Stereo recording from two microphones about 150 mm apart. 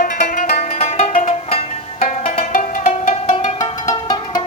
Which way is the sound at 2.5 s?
50° left (ahead or behind).